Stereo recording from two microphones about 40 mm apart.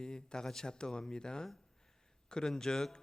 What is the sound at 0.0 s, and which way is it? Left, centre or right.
A man's voice, centre.